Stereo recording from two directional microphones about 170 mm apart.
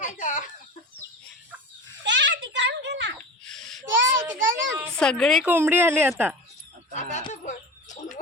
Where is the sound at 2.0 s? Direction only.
90° right.